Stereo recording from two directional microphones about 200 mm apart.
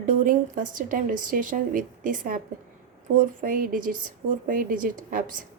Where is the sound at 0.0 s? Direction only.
40° right (ahead or behind).